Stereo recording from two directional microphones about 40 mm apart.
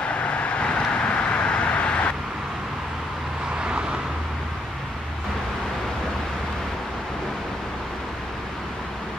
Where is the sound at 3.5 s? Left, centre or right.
Right.